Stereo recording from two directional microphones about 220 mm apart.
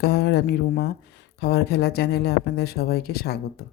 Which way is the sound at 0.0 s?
45° left (ahead or behind).